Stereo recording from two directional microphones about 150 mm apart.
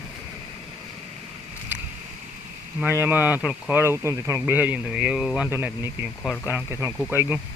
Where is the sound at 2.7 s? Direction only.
15° right (ahead or behind).